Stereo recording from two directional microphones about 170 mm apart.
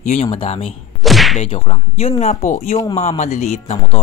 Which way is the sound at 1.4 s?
35° left (ahead or behind).